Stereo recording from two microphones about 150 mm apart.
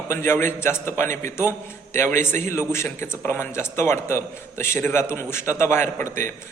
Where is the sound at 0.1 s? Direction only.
15° left (ahead or behind).